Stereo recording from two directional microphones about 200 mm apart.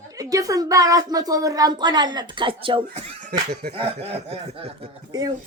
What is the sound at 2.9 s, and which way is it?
Speech, 40° right (ahead or behind).